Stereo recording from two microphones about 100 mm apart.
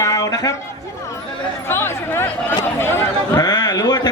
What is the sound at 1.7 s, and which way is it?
Speech, 25° left (ahead or behind).